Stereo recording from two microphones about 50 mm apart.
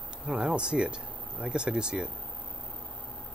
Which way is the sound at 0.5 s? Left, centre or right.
Centre.